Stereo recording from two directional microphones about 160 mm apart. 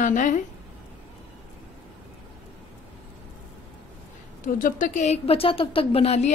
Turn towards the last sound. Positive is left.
turn(degrees=45)  # may be behind; listen again after turning